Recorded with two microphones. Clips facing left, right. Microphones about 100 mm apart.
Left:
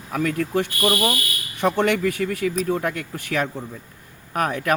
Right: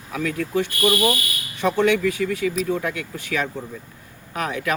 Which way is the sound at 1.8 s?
50° left (ahead or behind).